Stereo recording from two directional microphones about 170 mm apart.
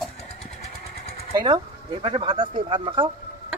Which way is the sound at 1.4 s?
25° right (ahead or behind).